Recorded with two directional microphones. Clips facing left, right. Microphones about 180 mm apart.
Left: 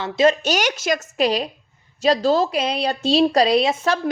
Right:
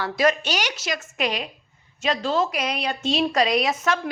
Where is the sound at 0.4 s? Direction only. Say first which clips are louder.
Left 6 dB; 45° left (ahead or behind).